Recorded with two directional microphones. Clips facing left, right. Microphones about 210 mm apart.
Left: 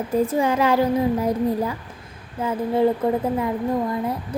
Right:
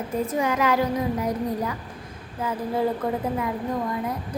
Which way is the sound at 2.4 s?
25° left (ahead or behind).